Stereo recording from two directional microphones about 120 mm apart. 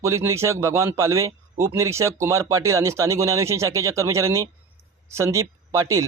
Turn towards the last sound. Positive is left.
turn(degrees=-25)  # may be behind; listen again after turning